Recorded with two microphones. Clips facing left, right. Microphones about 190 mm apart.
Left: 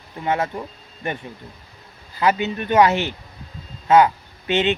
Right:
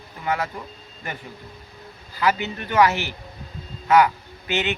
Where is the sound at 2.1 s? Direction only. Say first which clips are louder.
Left 3 dB; 20° left (ahead or behind).